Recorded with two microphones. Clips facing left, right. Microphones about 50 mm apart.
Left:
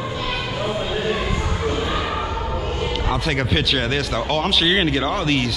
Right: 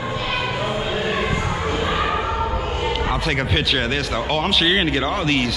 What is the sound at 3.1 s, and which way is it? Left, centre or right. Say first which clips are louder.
Speech: even; centre.